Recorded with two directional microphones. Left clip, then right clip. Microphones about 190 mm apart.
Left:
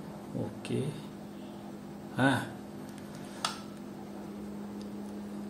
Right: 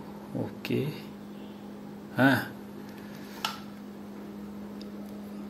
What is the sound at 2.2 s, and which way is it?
Speech, 15° right (ahead or behind).